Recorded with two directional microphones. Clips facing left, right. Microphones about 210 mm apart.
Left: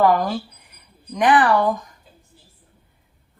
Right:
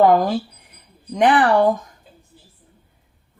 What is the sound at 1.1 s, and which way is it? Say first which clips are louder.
Speech: right 1 dB; 25° right (ahead or behind).